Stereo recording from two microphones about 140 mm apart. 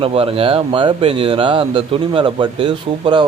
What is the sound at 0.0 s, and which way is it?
Speech, 40° right (ahead or behind).